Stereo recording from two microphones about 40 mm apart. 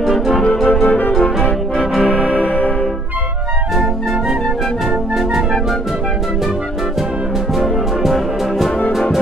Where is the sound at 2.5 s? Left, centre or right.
Left.